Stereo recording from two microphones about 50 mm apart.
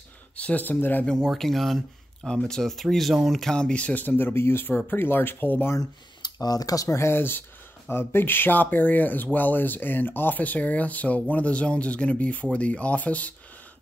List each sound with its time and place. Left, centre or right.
0.4 s speech: left
1.0 s speech: centre
2.2 s speech: centre
3.5 s speech: left
4.6 s speech: left
6.9 s speech: left
7.2 s speech: left